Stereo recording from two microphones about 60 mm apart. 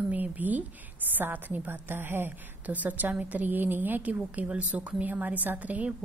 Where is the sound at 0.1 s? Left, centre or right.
Right.